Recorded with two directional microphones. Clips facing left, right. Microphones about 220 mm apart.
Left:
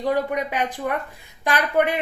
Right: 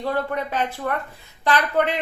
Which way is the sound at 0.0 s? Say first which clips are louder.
Left 2 dB; 15° left (ahead or behind).